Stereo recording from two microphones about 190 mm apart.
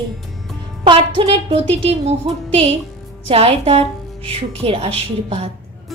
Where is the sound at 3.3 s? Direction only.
30° right (ahead or behind).